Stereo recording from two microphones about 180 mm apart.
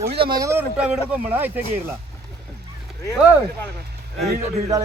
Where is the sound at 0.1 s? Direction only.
25° right (ahead or behind); by 1.5 s 10° right (ahead or behind).